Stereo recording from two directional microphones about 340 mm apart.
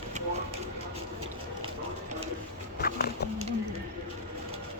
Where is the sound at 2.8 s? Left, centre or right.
Left.